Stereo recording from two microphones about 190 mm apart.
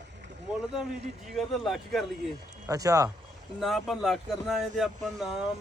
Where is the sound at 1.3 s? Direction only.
Centre (ahead or behind).